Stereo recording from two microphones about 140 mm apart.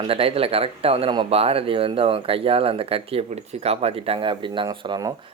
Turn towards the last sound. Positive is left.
turn(degrees=-30)  # may be behind; listen again after turning